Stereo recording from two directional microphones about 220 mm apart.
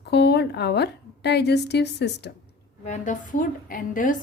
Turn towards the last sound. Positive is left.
turn(degrees=40)  # may be behind; listen again after turning